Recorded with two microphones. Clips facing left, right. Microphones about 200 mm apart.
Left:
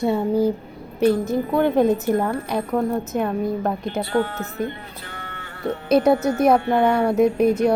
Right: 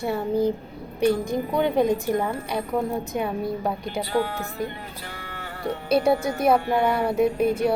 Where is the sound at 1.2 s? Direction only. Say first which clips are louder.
Left 4 dB; 5° left (ahead or behind).